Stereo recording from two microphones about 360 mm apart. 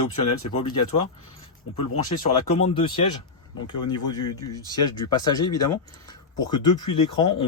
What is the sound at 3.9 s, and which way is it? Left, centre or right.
Speech, centre.